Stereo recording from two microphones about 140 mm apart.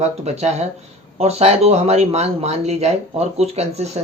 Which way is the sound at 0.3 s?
50° right (ahead or behind).